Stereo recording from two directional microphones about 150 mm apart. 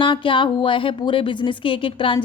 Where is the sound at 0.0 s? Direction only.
35° left (ahead or behind).